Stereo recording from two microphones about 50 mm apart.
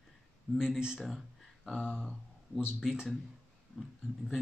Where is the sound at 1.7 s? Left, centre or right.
Left.